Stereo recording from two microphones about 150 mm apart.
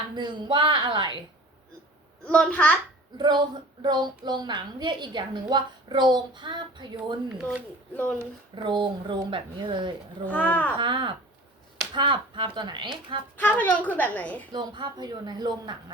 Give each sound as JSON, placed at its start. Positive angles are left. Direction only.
{"t": 0.2, "sound": "speech", "side_deg": -30}
{"t": 2.2, "sound": "a woman's voice", "side_deg": 5}
{"t": 3.2, "sound": "a woman's voice", "side_deg": -30}
{"t": 7.3, "sound": "speech", "side_deg": -5}
{"t": 8.5, "sound": "speech", "side_deg": -30}
{"t": 10.2, "sound": "a woman's voice", "side_deg": 10}
{"t": 10.8, "sound": "speech", "side_deg": -30}
{"t": 13.3, "sound": "a woman's voice", "side_deg": 10}
{"t": 14.5, "sound": "a woman's voice", "side_deg": -30}